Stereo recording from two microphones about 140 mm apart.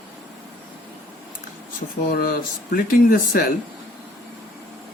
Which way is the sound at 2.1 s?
90° left.